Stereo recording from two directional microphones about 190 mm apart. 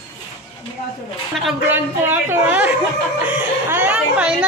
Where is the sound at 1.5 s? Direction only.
10° right (ahead or behind).